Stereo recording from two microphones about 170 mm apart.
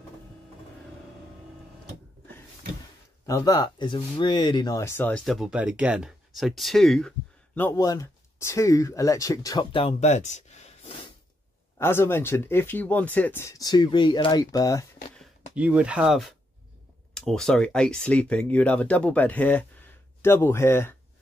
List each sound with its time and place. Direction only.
3.3 s speech: 20° left (ahead or behind)
5.2 s speech: centre (ahead or behind); by 11.0 s 40° left (ahead or behind)
11.8 s speech: 15° left (ahead or behind)
15.5 s speech: 5° right (ahead or behind); by 20.9 s 15° left (ahead or behind)